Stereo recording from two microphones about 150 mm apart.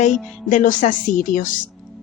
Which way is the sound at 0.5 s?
60° left (ahead or behind).